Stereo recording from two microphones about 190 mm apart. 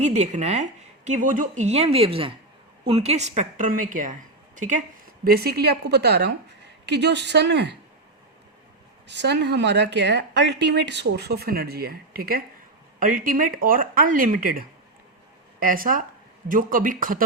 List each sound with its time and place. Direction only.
0.0 s a woman's voice: 35° right (ahead or behind)
5.2 s speech: 55° right (ahead or behind)
9.0 s speech: 65° right (ahead or behind); by 14.6 s 45° right (ahead or behind)
15.6 s speech: 45° right (ahead or behind)